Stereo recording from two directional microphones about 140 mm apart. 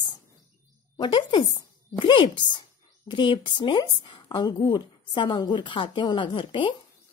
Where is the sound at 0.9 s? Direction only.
35° left (ahead or behind).